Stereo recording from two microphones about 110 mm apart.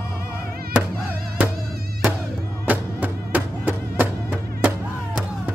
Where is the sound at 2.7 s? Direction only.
15° right (ahead or behind).